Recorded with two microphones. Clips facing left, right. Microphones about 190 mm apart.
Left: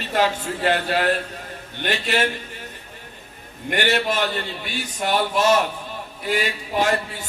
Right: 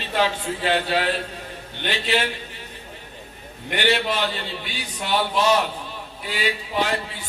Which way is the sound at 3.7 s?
45° left (ahead or behind).